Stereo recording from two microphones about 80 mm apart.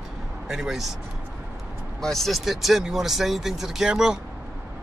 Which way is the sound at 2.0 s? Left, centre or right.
Centre.